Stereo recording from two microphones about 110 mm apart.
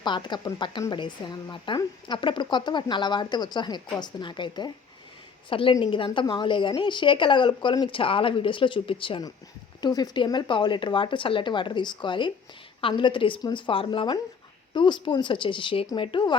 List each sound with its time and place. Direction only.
0.0 s speech: 45° left (ahead or behind)
9.8 s speech: 40° left (ahead or behind)